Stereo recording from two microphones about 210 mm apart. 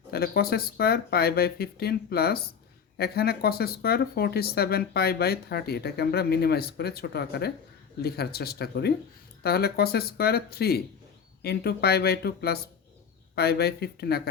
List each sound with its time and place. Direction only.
0.1 s speech: 45° left (ahead or behind)